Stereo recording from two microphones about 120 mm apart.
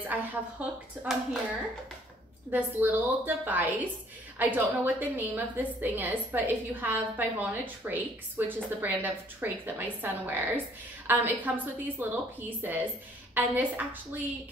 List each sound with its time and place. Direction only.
0.0 s a woman's voice: 15° right (ahead or behind)
2.5 s a woman's voice: 15° right (ahead or behind)